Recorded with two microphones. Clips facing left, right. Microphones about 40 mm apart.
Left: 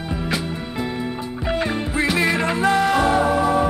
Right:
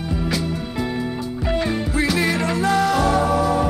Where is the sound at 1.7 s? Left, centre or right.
Left.